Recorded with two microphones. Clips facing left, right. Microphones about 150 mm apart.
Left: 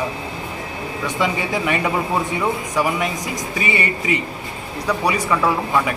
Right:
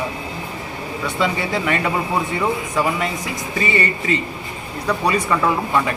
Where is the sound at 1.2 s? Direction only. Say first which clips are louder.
Even; 15° left (ahead or behind).